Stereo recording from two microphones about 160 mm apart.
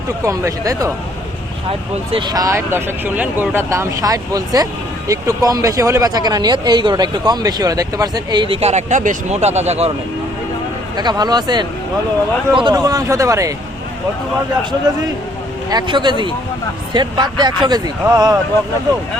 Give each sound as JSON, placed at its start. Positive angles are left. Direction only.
{"t": 0.3, "sound": "speech", "side_deg": -20}
{"t": 2.1, "sound": "speech", "side_deg": -25}
{"t": 10.9, "sound": "speech", "side_deg": -25}
{"t": 15.7, "sound": "speech", "side_deg": -30}